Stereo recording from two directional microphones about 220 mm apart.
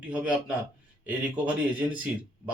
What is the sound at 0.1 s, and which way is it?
Speech, 5° right (ahead or behind).